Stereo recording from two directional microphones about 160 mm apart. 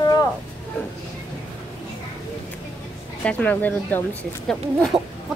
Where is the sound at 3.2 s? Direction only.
10° left (ahead or behind).